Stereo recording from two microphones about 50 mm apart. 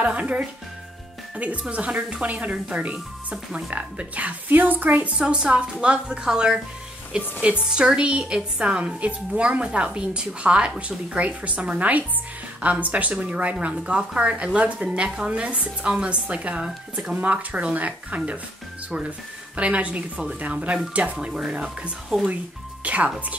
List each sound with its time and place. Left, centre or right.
0.0 s speech: right
5.1 s a woman's voice: centre
21.3 s a woman's voice: centre
22.8 s speech: right